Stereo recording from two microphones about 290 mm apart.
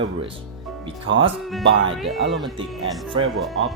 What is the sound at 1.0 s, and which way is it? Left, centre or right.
Speech, right.